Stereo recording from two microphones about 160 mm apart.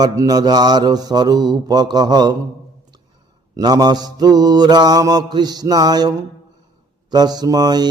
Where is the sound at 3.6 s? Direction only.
25° right (ahead or behind).